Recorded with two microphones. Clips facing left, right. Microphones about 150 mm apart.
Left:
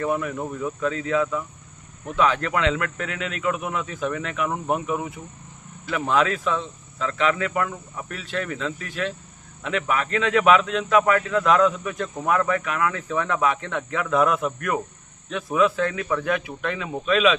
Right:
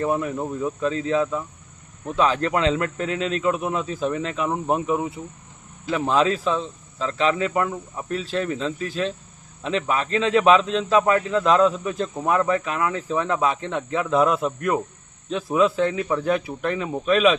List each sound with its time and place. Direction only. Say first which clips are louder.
0.0 s speech: right 2 dB; 25° right (ahead or behind)